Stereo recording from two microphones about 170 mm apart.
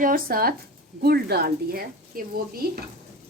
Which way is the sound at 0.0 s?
60° right (ahead or behind).